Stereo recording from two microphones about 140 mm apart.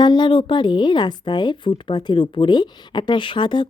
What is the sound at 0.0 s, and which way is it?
Speech, 35° left (ahead or behind).